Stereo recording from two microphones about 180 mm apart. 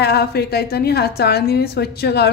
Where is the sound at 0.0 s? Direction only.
65° left (ahead or behind).